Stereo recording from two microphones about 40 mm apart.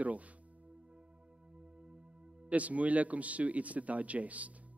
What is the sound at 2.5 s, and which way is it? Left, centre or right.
A man's voice, right.